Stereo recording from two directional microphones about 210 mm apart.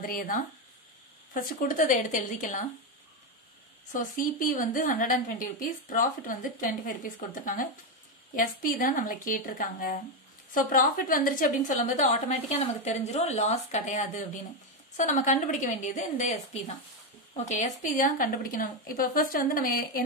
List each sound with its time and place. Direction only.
0.0 s a woman's voice: 40° left (ahead or behind)
3.9 s a woman's voice: 40° left (ahead or behind)